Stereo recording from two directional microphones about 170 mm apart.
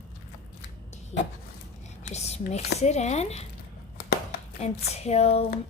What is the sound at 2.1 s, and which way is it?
Speech, 40° left (ahead or behind).